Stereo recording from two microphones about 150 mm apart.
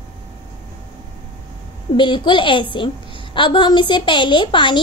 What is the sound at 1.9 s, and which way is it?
A woman's voice, 30° left (ahead or behind).